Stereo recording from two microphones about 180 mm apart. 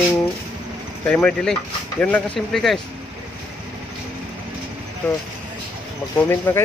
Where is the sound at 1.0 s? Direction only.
5° left (ahead or behind).